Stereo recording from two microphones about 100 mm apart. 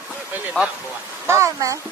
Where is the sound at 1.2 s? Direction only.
30° right (ahead or behind).